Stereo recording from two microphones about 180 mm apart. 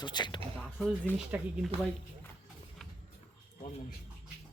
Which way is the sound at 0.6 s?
Centre (ahead or behind).